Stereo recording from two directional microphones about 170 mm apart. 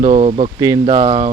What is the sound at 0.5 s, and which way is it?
Speech, 20° right (ahead or behind).